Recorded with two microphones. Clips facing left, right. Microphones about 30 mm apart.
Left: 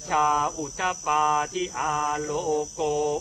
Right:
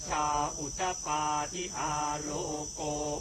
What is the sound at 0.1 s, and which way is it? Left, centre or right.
Cricket, left.